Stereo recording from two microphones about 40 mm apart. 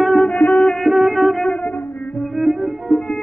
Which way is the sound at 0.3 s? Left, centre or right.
Left.